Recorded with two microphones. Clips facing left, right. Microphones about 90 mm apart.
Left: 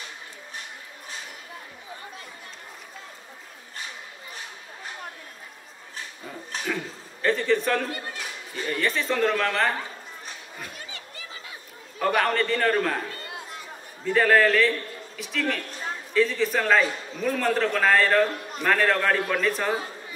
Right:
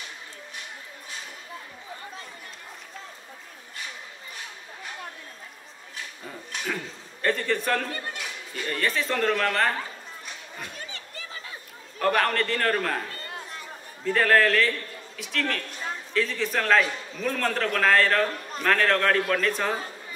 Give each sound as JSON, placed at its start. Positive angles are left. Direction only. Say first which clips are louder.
{"t": 6.6, "sound": "a man's voice", "louder": "left 2 dB", "side_deg": 0}
{"t": 8.1, "sound": "a sound", "louder": "even", "side_deg": 35}
{"t": 8.6, "sound": "a man's voice", "louder": "left 1 dB", "side_deg": 0}
{"t": 12.0, "sound": "a man's voice", "louder": "left 1 dB", "side_deg": 5}
{"t": 13.1, "sound": "chatter", "louder": "left 1 dB", "side_deg": -40}
{"t": 14.0, "sound": "a man's voice", "louder": "left 1 dB", "side_deg": 0}